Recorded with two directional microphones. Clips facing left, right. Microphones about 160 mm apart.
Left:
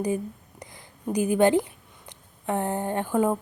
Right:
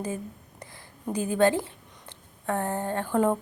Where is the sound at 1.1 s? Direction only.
15° left (ahead or behind).